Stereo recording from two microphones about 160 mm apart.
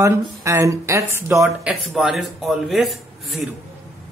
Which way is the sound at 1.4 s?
Centre (ahead or behind).